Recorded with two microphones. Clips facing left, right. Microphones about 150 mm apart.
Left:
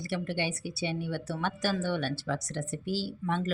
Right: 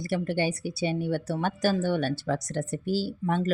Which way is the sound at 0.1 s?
45° right (ahead or behind).